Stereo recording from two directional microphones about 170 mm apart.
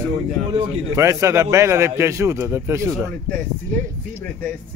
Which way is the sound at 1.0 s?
20° right (ahead or behind).